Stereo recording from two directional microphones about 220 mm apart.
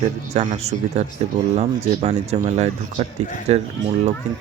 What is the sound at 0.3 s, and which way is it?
Speech, 30° right (ahead or behind).